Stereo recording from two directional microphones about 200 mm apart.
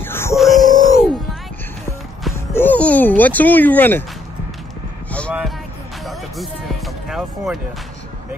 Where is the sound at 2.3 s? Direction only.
10° left (ahead or behind).